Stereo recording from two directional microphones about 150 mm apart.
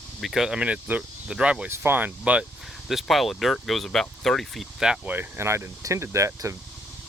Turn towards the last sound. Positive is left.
turn(degrees=-20)  # may be behind; listen again after turning